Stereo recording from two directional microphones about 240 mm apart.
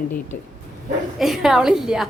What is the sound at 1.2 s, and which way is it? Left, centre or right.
Speech, centre.